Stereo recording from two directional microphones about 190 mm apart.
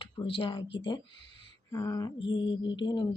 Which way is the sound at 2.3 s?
25° left (ahead or behind).